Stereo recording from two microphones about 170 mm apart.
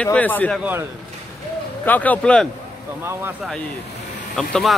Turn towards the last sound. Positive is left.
turn(degrees=0)  # may be behind; listen again after turning